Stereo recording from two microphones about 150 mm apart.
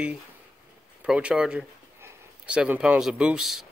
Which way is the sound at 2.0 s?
15° right (ahead or behind).